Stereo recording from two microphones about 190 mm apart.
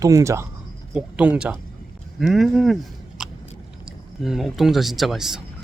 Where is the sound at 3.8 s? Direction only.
Centre (ahead or behind).